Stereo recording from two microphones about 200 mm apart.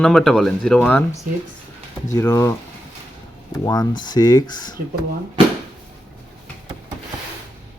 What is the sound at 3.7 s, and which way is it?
Speech, 20° left (ahead or behind).